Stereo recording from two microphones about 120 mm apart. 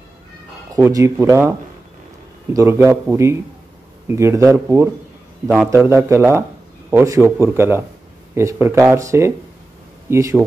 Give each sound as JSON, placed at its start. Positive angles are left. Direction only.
{"t": 0.7, "sound": "a man's voice", "side_deg": -25}
{"t": 2.5, "sound": "a man's voice", "side_deg": -25}